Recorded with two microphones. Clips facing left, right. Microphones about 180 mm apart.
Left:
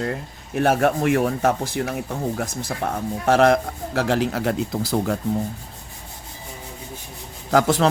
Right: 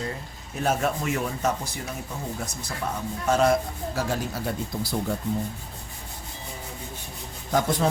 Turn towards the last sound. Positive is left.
turn(degrees=80)